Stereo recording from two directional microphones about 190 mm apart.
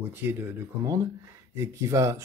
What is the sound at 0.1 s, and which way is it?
Speech, 10° right (ahead or behind).